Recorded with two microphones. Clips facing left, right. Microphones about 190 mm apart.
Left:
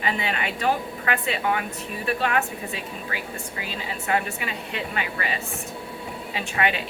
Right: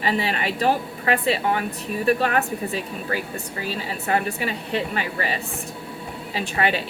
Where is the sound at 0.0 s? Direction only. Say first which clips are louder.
Right 3 dB; 35° right (ahead or behind).